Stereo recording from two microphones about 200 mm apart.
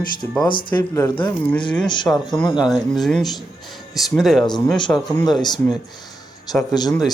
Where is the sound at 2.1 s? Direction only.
5° left (ahead or behind).